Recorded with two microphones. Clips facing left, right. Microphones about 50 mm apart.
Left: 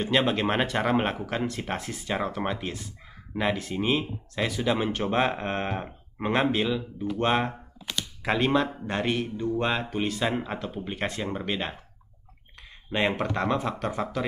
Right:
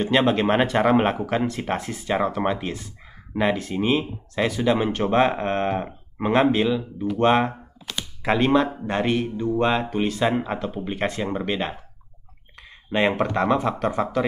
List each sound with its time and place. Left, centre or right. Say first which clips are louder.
0.0 s speech: right 5 dB; centre
7.9 s computer keyboard: right 1 dB; centre
8.2 s speech: right 5 dB; centre